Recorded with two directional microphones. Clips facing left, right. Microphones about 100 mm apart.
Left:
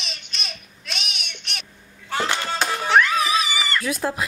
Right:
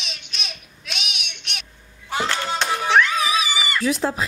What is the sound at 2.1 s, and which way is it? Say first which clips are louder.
Hands: even; 15° right (ahead or behind).